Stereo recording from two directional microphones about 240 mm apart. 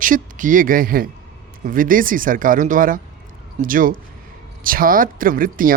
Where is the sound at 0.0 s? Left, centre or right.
Right.